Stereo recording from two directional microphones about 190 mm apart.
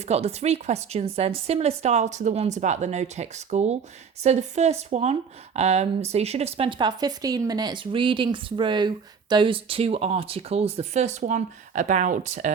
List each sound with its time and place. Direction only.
0.0 s a woman's voice: 35° right (ahead or behind)